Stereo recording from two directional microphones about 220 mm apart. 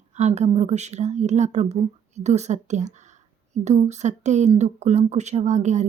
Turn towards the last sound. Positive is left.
turn(degrees=-30)  # may be behind; listen again after turning